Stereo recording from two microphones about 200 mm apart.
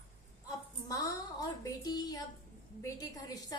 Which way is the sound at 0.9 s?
15° left (ahead or behind).